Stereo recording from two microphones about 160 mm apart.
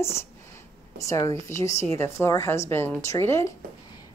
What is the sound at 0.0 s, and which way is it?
A woman's voice, 15° left (ahead or behind).